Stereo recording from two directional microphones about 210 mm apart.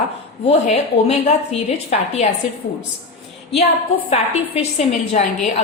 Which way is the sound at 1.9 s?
30° left (ahead or behind).